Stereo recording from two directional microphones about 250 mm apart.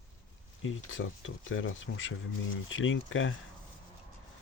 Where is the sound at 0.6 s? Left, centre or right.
Left.